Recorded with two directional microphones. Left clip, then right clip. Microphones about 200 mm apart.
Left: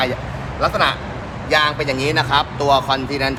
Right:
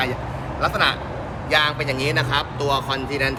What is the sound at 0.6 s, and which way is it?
Speech, 15° left (ahead or behind).